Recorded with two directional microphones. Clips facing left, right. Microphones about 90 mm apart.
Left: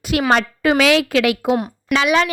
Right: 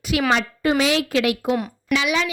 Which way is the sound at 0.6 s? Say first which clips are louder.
Left 4 dB; 90° left.